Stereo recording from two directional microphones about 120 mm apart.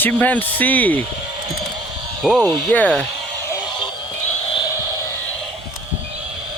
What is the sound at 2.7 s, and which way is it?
Speech, 10° left (ahead or behind).